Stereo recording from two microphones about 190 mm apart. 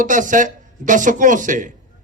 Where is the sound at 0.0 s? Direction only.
45° right (ahead or behind).